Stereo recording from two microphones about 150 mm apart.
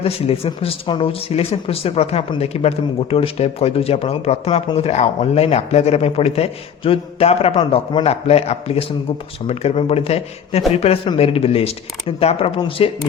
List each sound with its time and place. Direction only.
0.0 s speech: 40° left (ahead or behind)